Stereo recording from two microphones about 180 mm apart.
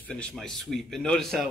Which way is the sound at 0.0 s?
5° left (ahead or behind).